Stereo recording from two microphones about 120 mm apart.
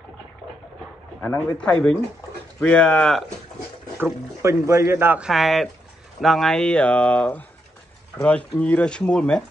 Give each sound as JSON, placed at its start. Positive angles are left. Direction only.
{"t": 1.6, "sound": "speech", "side_deg": 10}
{"t": 4.0, "sound": "speech", "side_deg": -25}
{"t": 5.2, "sound": "speech", "side_deg": 0}